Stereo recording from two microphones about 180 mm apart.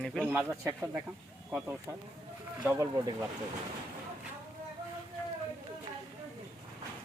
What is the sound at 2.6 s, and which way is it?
Speech, 20° right (ahead or behind).